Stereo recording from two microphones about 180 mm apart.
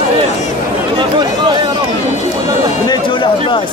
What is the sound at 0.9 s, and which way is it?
Chatter, 25° right (ahead or behind).